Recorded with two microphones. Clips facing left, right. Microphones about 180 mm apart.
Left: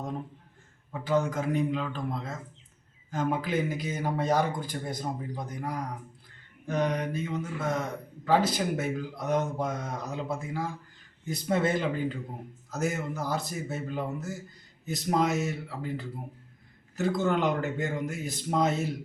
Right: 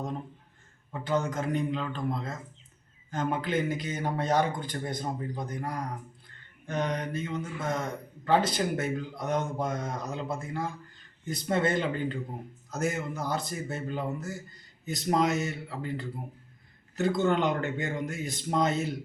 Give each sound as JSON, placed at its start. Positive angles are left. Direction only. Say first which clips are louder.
{"t": 0.9, "sound": "a man's voice", "louder": "left 2 dB", "side_deg": 5}